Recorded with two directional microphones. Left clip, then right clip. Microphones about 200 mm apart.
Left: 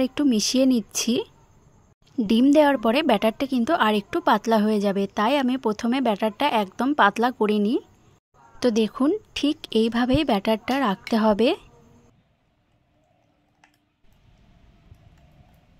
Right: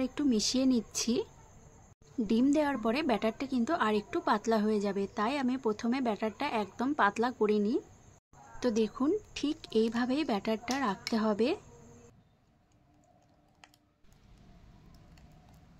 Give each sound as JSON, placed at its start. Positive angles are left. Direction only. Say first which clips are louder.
{"t": 0.0, "sound": "a woman's voice", "louder": "left 8 dB", "side_deg": 45}